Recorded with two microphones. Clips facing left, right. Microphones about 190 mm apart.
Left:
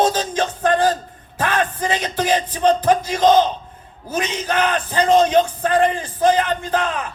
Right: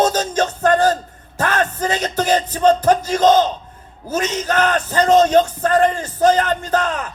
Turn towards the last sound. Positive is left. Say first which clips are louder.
# right 1 dB
turn(degrees=-40)  # may be behind; listen again after turning